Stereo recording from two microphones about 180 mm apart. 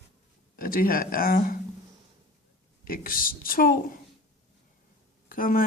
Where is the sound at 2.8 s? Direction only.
55° left (ahead or behind).